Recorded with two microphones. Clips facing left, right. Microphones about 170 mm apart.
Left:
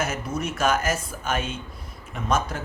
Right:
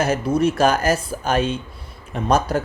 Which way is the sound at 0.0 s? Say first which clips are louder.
Right 9 dB; 30° right (ahead or behind).